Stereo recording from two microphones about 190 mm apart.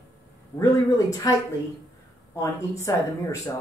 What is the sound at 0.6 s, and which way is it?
Speech, 15° left (ahead or behind).